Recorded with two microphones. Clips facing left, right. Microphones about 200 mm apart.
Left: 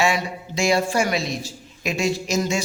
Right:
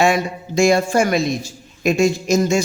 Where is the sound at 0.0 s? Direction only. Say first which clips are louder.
Right 5 dB; 50° right (ahead or behind).